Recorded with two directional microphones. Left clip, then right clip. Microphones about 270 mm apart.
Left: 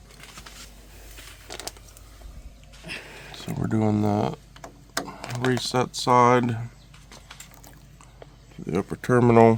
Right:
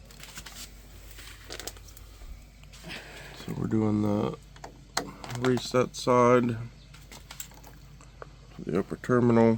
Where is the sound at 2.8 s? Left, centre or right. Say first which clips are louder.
Left 4 dB; centre.